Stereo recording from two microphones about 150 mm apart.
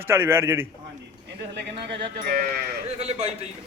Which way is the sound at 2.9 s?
45° right (ahead or behind).